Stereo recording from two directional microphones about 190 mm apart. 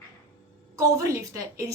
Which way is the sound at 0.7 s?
15° right (ahead or behind).